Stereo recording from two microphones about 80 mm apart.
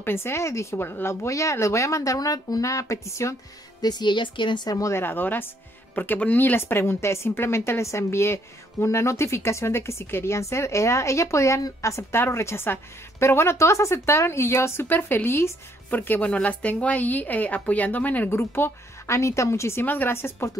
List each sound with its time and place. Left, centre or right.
0.0 s speech: left
3.8 s a woman's voice: left
4.6 s speech: left
4.9 s speech: left
18.3 s speech: left